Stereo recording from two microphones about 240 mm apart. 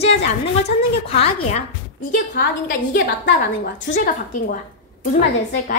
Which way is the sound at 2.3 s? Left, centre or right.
Left.